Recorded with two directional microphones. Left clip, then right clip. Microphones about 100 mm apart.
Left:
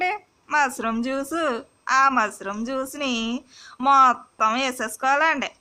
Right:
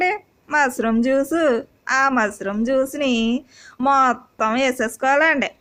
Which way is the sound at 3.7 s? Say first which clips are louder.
Even; 35° right (ahead or behind).